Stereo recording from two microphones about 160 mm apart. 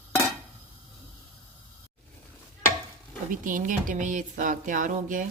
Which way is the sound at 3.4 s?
55° right (ahead or behind).